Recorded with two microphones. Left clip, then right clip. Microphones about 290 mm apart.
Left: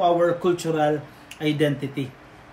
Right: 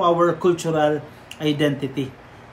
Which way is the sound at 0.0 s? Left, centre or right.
Centre.